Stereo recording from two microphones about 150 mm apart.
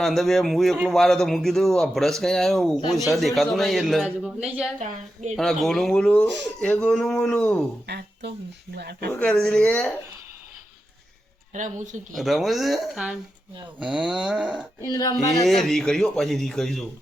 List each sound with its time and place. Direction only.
0.0 s speech: centre (ahead or behind)
4.8 s a woman's voice: 55° right (ahead or behind)
5.4 s speech: centre (ahead or behind)
8.7 s speech: 90° right
9.1 s speech: 5° left (ahead or behind)
11.5 s speech: 55° right (ahead or behind)
12.1 s speech: centre (ahead or behind)
14.8 s speech: 25° left (ahead or behind)
15.4 s speech: centre (ahead or behind)